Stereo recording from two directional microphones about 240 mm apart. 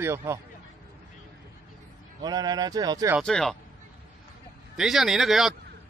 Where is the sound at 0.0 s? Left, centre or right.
Centre.